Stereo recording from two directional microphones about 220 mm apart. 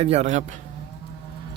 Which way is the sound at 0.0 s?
30° right (ahead or behind).